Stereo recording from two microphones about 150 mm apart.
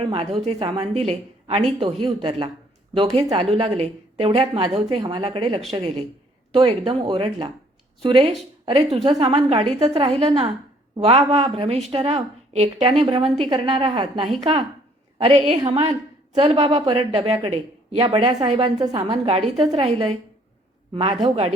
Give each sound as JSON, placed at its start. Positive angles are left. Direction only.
{"t": 0.3, "sound": "a woman's voice", "side_deg": -40}
{"t": 18.8, "sound": "a woman's voice", "side_deg": -30}